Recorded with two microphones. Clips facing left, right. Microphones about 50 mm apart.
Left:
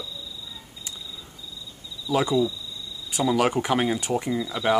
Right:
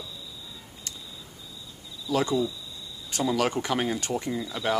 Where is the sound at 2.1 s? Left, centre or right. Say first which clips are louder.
Left 3 dB; centre.